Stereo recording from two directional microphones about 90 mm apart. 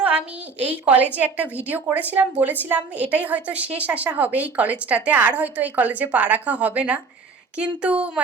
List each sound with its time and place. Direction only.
0.6 s a woman's voice: 15° right (ahead or behind)